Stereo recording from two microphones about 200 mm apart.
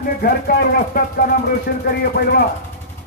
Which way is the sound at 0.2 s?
50° left (ahead or behind).